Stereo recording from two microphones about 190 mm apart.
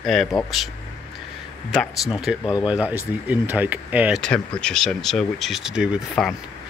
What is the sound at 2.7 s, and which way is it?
Speech, 10° right (ahead or behind).